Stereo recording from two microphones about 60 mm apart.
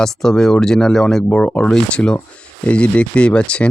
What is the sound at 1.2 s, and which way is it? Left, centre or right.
Speech, centre.